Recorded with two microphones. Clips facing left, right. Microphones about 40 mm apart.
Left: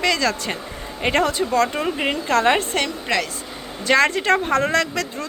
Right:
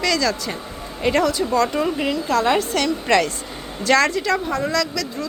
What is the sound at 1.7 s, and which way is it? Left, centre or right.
Speech, left.